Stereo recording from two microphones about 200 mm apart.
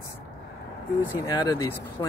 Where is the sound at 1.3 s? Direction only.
20° left (ahead or behind).